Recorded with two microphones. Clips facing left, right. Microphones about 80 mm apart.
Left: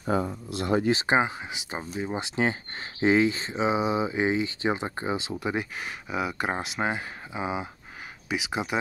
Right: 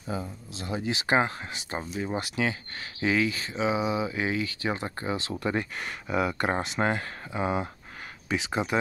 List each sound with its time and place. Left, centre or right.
0.0 s speech: left
1.0 s speech: centre